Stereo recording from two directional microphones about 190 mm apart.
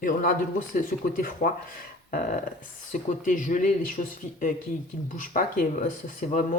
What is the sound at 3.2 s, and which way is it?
Speech, 45° left (ahead or behind).